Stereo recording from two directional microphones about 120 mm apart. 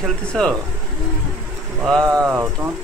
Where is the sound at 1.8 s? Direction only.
5° left (ahead or behind).